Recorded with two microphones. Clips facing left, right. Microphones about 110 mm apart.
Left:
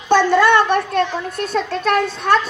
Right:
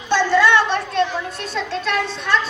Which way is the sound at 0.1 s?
50° left (ahead or behind).